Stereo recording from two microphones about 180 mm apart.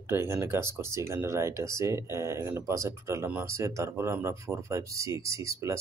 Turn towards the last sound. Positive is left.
turn(degrees=-15)  # may be behind; listen again after turning